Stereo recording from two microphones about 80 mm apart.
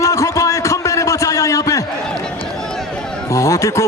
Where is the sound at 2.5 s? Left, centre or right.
Centre.